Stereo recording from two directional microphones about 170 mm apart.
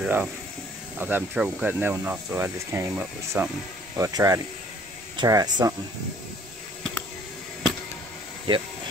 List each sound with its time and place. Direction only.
0.0 s speech: 5° right (ahead or behind)